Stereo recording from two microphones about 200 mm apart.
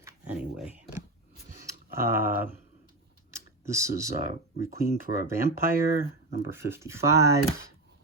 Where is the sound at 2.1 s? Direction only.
10° right (ahead or behind).